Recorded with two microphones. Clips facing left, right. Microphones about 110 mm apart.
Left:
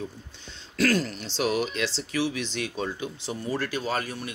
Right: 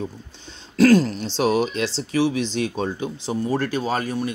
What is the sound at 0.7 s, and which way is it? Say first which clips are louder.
Speech: right 9 dB; 25° right (ahead or behind).